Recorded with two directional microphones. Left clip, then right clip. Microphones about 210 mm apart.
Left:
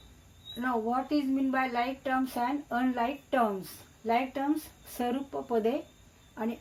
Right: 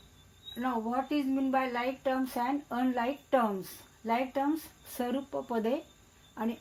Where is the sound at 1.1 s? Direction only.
35° right (ahead or behind).